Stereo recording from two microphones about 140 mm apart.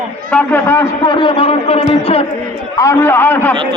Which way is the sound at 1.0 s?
35° left (ahead or behind).